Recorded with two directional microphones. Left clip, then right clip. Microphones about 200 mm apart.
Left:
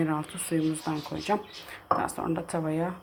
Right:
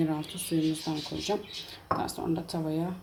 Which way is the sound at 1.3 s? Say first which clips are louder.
Left 5 dB; 5° left (ahead or behind).